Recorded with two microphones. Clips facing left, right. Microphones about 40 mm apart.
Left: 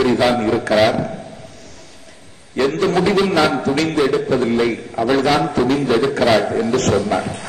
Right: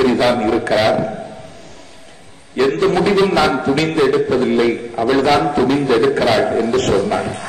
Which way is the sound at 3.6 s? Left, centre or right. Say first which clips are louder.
Right 2 dB; right.